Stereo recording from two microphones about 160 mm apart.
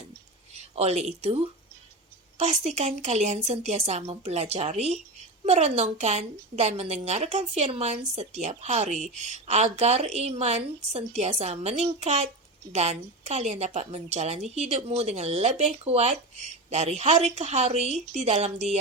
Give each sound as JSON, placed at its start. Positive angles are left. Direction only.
{"t": 0.5, "sound": "a woman's voice", "side_deg": -45}